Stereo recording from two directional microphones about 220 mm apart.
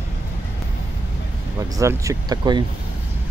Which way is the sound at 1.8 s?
15° right (ahead or behind).